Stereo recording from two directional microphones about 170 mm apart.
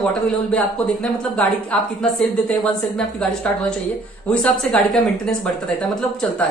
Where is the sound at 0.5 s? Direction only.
5° left (ahead or behind).